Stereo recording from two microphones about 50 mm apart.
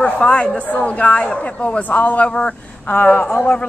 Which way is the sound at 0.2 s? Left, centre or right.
Left.